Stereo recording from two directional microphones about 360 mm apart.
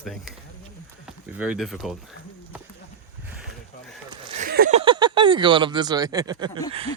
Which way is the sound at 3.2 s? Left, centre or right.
Centre.